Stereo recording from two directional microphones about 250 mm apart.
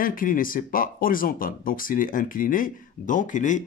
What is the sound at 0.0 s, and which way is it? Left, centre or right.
Speech, left.